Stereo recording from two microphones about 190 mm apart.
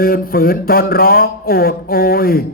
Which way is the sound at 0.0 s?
50° left (ahead or behind).